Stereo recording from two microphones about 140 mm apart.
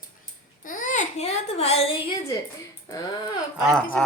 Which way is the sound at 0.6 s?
70° left (ahead or behind).